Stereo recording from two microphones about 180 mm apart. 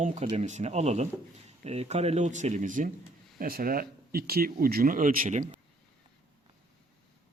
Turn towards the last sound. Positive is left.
turn(degrees=-45)  # may be behind; listen again after turning